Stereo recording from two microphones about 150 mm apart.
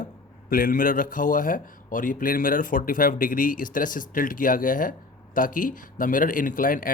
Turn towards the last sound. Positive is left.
turn(degrees=65)  # may be behind; listen again after turning